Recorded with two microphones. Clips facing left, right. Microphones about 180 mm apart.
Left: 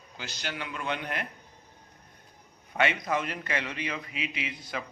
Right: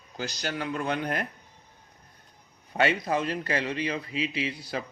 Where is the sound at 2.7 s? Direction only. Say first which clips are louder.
Right 2 dB; 35° right (ahead or behind).